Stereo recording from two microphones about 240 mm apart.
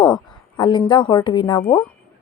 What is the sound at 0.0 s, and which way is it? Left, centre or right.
A woman's voice, centre.